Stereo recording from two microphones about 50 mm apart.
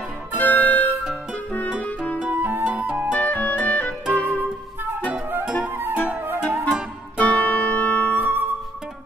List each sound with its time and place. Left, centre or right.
0.4 s music: left
2.1 s flute: right
3.1 s music: left
5.4 s music: right
6.2 s music: right
7.2 s music: left
8.2 s music: right